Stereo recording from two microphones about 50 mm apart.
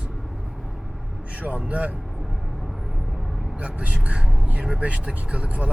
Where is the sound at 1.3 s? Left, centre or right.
Right.